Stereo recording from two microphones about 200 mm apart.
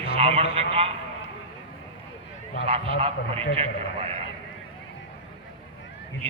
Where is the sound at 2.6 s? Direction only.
30° right (ahead or behind).